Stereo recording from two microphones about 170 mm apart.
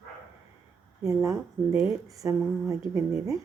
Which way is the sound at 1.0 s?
20° right (ahead or behind).